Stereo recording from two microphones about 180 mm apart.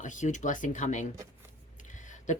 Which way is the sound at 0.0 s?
45° left (ahead or behind).